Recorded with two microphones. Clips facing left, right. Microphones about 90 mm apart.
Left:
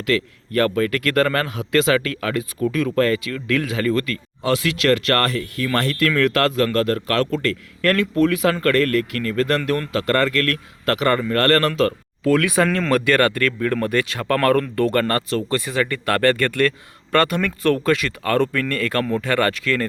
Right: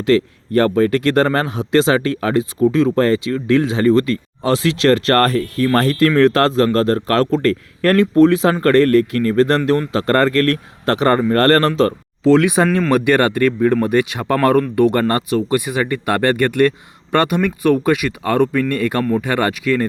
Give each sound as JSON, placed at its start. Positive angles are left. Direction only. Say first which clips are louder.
{"t": 0.0, "sound": "a man's voice", "louder": "right 7 dB", "side_deg": -30}
{"t": 12.6, "sound": "speech", "louder": "right 4 dB", "side_deg": -5}
{"t": 12.9, "sound": "speech", "louder": "right 3 dB", "side_deg": -20}